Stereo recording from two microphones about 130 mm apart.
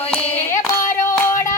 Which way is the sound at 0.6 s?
20° left (ahead or behind).